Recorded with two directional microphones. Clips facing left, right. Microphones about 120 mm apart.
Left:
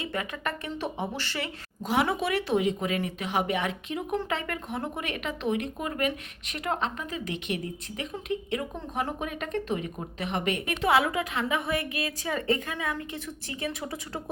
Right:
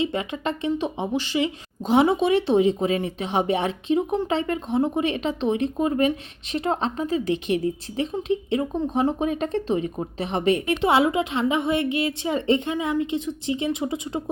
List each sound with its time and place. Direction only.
0.0 s speech: 25° right (ahead or behind)